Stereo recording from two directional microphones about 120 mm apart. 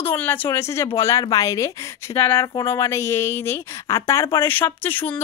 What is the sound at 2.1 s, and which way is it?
A woman's voice, 20° left (ahead or behind).